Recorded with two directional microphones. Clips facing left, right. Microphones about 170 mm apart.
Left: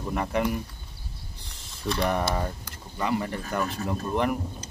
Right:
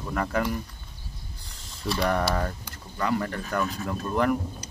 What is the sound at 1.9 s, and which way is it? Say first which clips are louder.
Speech: right 1 dB; 20° left (ahead or behind).